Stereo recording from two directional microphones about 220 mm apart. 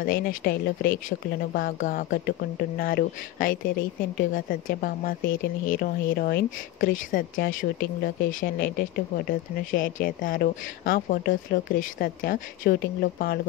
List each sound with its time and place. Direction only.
0.0 s a woman's voice: 40° left (ahead or behind)